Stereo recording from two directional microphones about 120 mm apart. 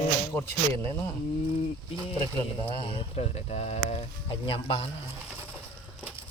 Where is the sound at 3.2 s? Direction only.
65° left (ahead or behind).